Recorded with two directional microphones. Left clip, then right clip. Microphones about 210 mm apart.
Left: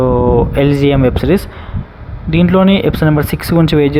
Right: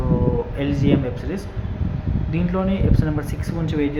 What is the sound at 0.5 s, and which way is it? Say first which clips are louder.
Speech: left 10 dB; 45° left (ahead or behind).